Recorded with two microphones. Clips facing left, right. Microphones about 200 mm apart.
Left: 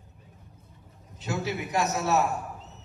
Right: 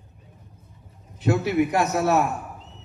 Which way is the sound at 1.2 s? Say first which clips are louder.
Right 10 dB; 60° right (ahead or behind).